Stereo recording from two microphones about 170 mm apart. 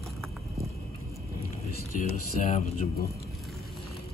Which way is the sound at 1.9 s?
50° left (ahead or behind).